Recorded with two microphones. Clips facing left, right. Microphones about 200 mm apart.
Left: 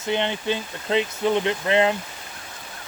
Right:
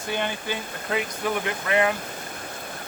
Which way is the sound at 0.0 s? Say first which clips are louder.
Left 4 dB; 25° left (ahead or behind).